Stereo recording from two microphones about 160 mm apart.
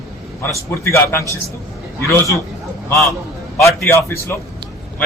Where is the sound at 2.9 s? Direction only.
20° left (ahead or behind).